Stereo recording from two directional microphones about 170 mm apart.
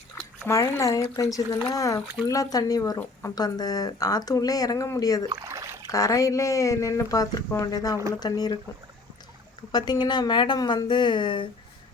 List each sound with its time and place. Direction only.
0.4 s speech: 20° left (ahead or behind)
3.0 s speech: 10° left (ahead or behind)
3.3 s speech: 25° left (ahead or behind)
5.3 s a sound: 20° right (ahead or behind)
5.9 s speech: 20° left (ahead or behind)
9.7 s speech: 25° left (ahead or behind)